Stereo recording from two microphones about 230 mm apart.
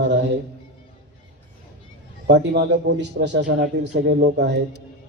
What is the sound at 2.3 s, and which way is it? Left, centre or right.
A man's voice, right.